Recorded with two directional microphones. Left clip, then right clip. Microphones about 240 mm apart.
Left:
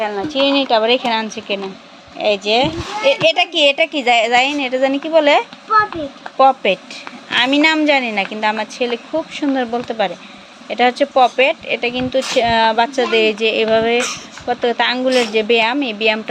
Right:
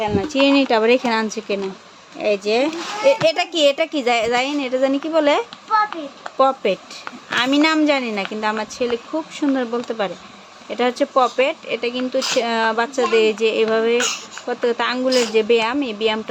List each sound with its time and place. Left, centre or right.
0.4 s speech: right
0.7 s a woman's voice: right; by 16.3 s centre